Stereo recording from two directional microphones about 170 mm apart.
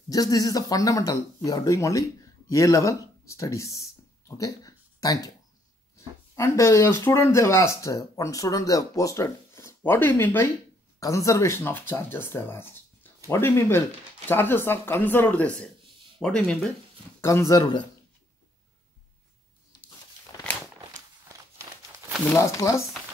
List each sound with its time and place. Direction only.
0.1 s speech: 20° left (ahead or behind); by 16.7 s 5° left (ahead or behind)
17.2 s speech: 15° left (ahead or behind)
22.3 s speech: 20° left (ahead or behind)